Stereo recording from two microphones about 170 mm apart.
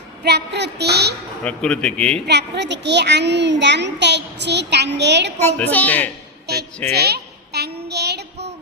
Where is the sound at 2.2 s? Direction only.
85° right.